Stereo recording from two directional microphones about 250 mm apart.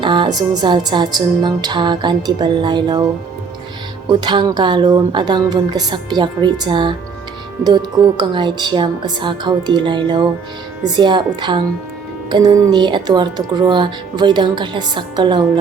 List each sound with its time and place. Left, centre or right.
0.0 s speech: centre
4.1 s speech: centre